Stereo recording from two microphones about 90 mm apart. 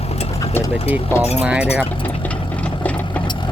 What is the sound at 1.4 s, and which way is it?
Speech, 15° right (ahead or behind).